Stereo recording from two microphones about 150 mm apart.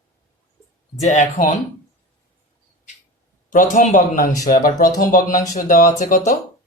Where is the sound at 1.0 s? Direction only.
55° left (ahead or behind).